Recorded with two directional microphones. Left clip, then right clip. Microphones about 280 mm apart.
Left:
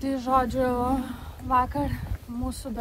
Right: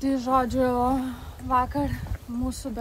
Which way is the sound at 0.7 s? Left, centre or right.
Right.